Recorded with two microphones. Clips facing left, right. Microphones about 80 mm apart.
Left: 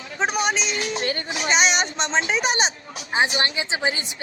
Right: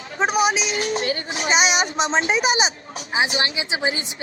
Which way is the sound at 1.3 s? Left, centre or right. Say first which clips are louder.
Even; right.